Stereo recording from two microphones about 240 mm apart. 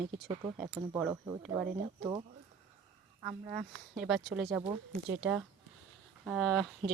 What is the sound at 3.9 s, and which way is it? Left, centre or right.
Speech, centre.